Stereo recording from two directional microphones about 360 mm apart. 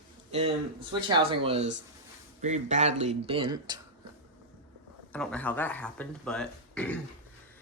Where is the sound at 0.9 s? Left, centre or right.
Centre.